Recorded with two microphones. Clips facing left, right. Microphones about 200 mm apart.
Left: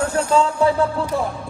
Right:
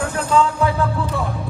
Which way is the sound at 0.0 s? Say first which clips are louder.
Left 1 dB; 30° left (ahead or behind).